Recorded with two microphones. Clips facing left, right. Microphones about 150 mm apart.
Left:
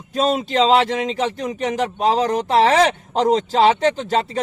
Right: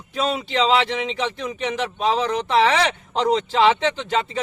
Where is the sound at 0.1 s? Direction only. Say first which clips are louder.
Left 4 dB; 45° left (ahead or behind).